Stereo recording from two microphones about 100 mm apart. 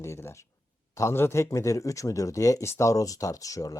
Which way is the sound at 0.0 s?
25° left (ahead or behind).